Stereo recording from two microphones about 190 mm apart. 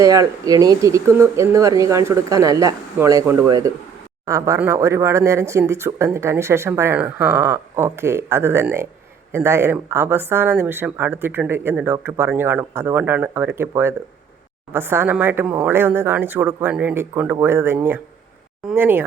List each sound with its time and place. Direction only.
0.0 s speech: 15° right (ahead or behind)